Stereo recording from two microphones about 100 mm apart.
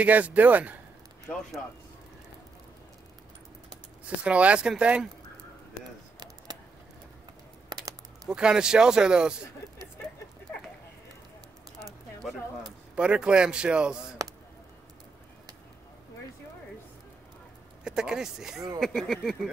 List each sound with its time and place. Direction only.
0.0 s speech: 15° right (ahead or behind)
4.2 s speech: 10° right (ahead or behind)
7.7 s typing: 40° right (ahead or behind)
8.3 s speech: 10° right (ahead or behind)
12.9 s speech: 10° right (ahead or behind)
17.8 s speech: 5° right (ahead or behind)